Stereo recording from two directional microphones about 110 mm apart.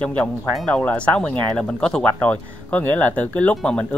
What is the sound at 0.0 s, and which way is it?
A man's voice, 10° left (ahead or behind).